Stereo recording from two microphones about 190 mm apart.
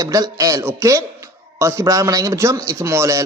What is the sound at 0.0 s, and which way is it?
A man's voice, 15° right (ahead or behind).